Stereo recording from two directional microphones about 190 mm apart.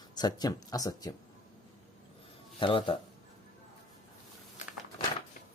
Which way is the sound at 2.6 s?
25° left (ahead or behind).